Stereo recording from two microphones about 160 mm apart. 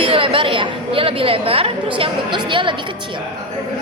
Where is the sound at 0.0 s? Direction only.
35° right (ahead or behind).